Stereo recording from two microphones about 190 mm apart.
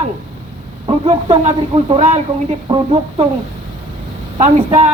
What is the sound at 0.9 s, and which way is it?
Speech, 30° right (ahead or behind).